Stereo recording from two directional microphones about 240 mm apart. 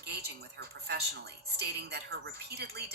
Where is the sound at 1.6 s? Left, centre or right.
Right.